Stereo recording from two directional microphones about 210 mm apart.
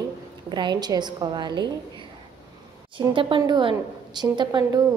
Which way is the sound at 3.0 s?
25° right (ahead or behind).